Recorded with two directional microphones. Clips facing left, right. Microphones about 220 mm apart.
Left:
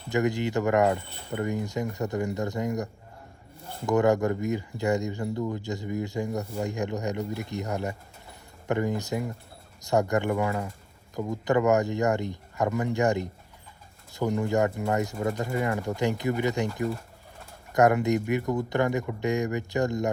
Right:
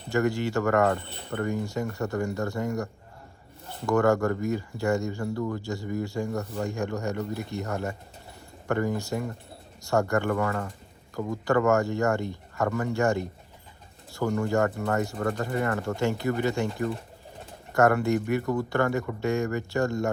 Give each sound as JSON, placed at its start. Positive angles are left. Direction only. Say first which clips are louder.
{"t": 0.1, "sound": "speech", "louder": "even", "side_deg": 20}
{"t": 17.7, "sound": "speech", "louder": "even", "side_deg": 15}